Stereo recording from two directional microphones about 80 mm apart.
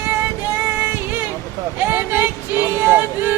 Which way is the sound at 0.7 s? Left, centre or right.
Right.